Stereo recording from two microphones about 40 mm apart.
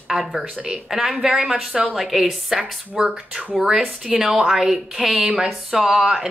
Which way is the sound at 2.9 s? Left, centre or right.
Right.